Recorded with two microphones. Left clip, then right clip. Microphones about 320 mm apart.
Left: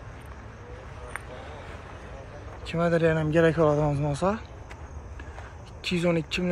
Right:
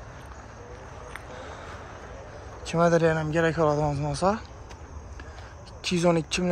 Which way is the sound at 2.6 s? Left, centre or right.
Centre.